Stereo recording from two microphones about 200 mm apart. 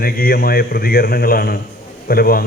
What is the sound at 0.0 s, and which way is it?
A man's voice, 50° left (ahead or behind).